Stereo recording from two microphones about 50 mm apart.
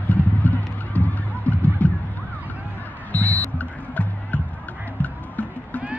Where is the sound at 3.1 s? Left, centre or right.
Left.